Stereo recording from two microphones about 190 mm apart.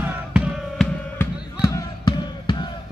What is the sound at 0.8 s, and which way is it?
Music, 15° left (ahead or behind).